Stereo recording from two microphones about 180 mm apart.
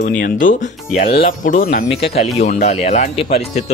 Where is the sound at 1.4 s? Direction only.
50° left (ahead or behind).